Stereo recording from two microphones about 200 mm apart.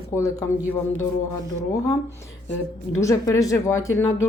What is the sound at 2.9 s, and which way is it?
Speech, 15° left (ahead or behind).